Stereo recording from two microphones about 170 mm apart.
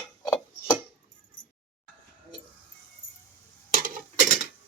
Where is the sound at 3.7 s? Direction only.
50° right (ahead or behind).